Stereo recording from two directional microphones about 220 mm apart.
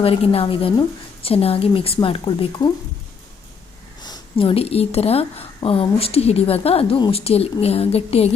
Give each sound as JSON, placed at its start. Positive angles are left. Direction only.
{"t": 0.0, "sound": "a woman's voice", "side_deg": 25}
{"t": 4.0, "sound": "a woman's voice", "side_deg": 20}